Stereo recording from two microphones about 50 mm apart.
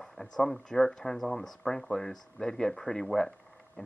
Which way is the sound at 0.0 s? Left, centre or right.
Centre.